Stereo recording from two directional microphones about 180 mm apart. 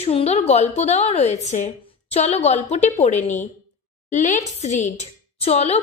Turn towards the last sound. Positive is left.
turn(degrees=35)  # may be behind; listen again after turning